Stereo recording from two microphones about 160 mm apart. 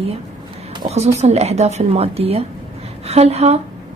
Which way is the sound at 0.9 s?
40° right (ahead or behind).